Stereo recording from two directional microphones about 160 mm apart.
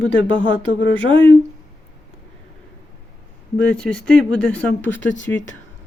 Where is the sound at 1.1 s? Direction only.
35° right (ahead or behind).